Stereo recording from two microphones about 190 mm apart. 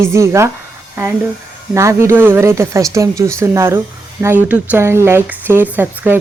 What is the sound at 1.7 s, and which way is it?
Speech, 15° right (ahead or behind).